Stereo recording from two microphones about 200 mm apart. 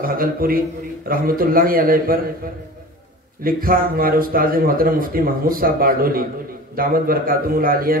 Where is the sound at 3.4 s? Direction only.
45° right (ahead or behind).